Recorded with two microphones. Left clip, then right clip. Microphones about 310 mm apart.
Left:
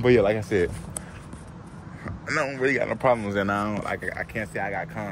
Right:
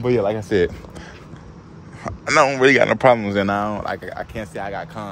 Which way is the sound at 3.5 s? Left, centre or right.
Centre.